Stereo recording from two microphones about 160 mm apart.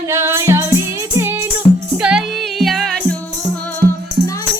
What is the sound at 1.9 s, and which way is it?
Music, 5° right (ahead or behind).